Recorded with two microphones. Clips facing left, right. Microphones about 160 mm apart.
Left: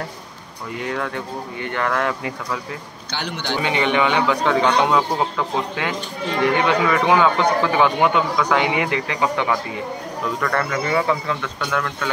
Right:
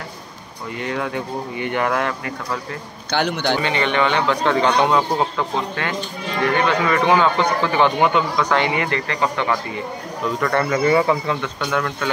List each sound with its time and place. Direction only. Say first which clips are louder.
0.7 s speech: right 1 dB; centre (ahead or behind)
1.0 s speech: right 2 dB; 15° right (ahead or behind)
3.1 s a man's voice: right 7 dB; 55° right (ahead or behind)
3.6 s a man's voice: left 5 dB; 10° left (ahead or behind)
10.4 s speech: right 5 dB; 5° right (ahead or behind)